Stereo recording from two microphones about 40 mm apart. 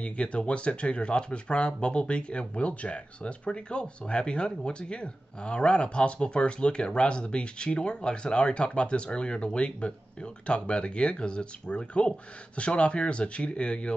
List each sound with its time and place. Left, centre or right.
0.0 s speech: left